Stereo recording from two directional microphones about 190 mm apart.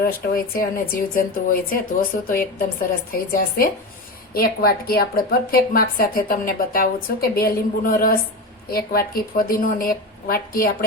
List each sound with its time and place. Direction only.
0.0 s a woman's voice: 50° left (ahead or behind)